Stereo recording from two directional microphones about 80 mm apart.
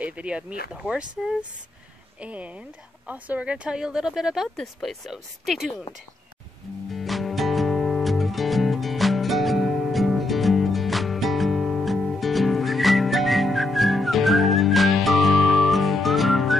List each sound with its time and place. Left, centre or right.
0.0 s speech: centre
6.9 s music: centre